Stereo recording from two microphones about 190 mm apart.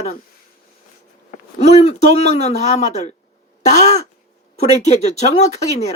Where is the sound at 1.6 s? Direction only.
35° left (ahead or behind).